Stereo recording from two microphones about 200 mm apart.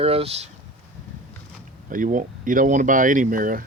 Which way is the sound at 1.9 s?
40° right (ahead or behind).